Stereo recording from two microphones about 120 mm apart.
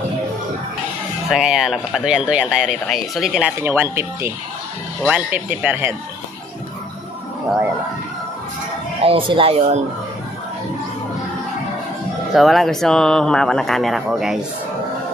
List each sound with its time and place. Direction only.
1.3 s speech: 5° right (ahead or behind)
3.5 s speech: 20° right (ahead or behind)
9.0 s speech: 45° right (ahead or behind)
12.4 s speech: centre (ahead or behind)